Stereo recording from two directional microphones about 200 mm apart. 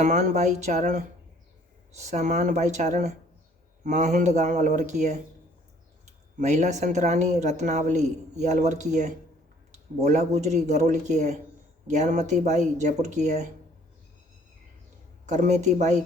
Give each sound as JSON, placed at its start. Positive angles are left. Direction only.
{"t": 0.0, "sound": "speech", "side_deg": -35}
{"t": 6.3, "sound": "speech", "side_deg": -35}
{"t": 10.0, "sound": "speech", "side_deg": -35}
{"t": 15.3, "sound": "speech", "side_deg": -35}